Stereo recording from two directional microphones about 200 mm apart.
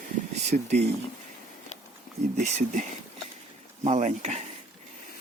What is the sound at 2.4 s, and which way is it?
Speech, 40° right (ahead or behind).